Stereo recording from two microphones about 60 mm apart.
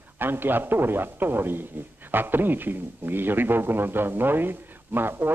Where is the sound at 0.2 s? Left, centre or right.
Right.